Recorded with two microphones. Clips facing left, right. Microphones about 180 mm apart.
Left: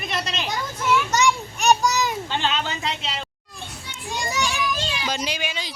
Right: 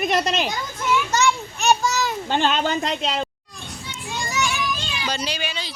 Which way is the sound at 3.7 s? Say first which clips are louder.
Right 1 dB; 15° left (ahead or behind).